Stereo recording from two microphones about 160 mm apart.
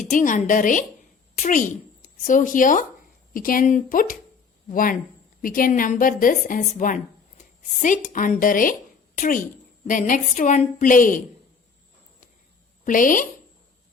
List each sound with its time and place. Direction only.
0.1 s a woman's voice: 50° left (ahead or behind)
12.8 s speech: 55° left (ahead or behind)